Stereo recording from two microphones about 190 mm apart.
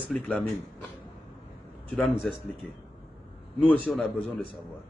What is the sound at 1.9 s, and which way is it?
Speech, 5° left (ahead or behind).